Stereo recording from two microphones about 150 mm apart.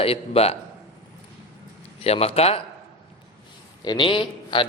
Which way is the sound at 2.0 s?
40° left (ahead or behind).